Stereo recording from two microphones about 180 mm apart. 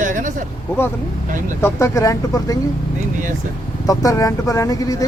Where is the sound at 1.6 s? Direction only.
15° left (ahead or behind).